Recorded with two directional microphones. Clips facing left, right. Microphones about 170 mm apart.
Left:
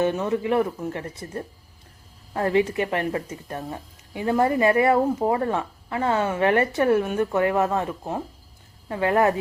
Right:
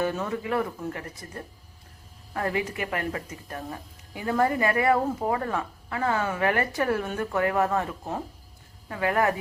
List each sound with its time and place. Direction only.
0.0 s speech: 25° left (ahead or behind)